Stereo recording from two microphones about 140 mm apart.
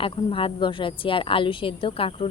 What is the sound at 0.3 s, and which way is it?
A woman's voice, 40° left (ahead or behind).